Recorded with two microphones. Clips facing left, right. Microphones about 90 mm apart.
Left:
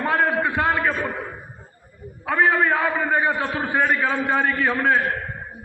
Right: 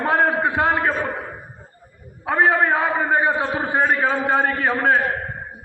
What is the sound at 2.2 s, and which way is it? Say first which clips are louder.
A man's voice: right 1 dB; 30° right (ahead or behind).